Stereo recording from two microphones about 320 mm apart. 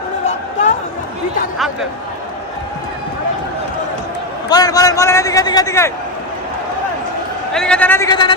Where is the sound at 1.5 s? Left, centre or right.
Centre.